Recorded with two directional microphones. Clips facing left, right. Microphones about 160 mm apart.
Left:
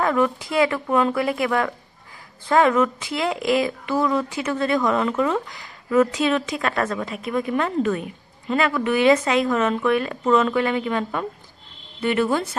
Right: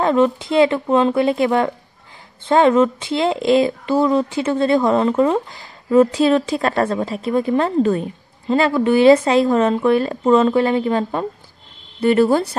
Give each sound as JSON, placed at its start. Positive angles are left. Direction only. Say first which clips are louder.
{"t": 0.0, "sound": "a woman's voice", "louder": "right 5 dB", "side_deg": -25}